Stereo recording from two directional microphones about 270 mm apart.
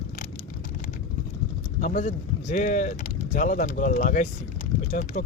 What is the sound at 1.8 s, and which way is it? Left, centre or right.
Speech, left.